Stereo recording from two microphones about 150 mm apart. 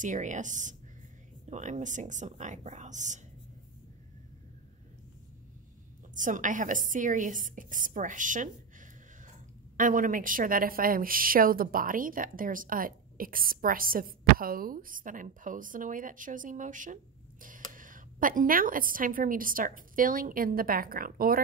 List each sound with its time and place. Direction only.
0.0 s a woman's voice: 55° right (ahead or behind)
6.1 s a woman's voice: 60° right (ahead or behind); by 21.4 s 75° right (ahead or behind)